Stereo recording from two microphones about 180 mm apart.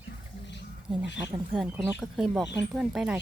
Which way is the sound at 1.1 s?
10° right (ahead or behind).